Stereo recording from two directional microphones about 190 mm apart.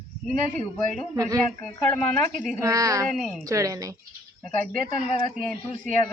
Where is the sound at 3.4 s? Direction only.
15° right (ahead or behind).